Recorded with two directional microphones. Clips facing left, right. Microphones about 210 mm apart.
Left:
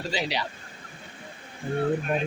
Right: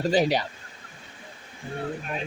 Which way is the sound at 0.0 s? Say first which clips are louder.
Right 8 dB; 50° right (ahead or behind).